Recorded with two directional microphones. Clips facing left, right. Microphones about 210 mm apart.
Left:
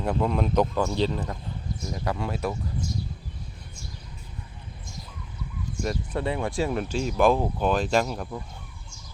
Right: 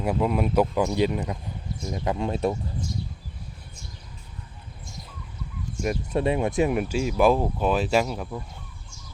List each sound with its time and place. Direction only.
0.0 s speech: 10° right (ahead or behind); by 2.6 s 25° right (ahead or behind)
5.8 s speech: 20° right (ahead or behind); by 8.4 s centre (ahead or behind)